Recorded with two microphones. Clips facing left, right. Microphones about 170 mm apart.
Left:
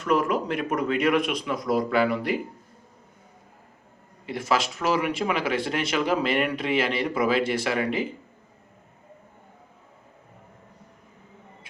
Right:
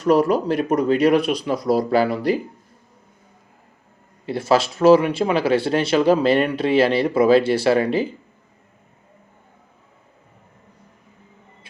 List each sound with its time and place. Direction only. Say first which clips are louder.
0.0 s speech: right 7 dB; 35° right (ahead or behind)
4.3 s speech: right 7 dB; 30° right (ahead or behind)